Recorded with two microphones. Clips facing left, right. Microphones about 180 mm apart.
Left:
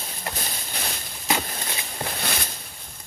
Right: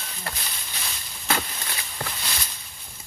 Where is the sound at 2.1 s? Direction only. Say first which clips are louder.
Left 5 dB; 60° left (ahead or behind).